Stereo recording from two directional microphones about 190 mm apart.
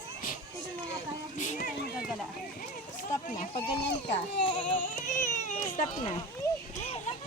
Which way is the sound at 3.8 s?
65° left (ahead or behind).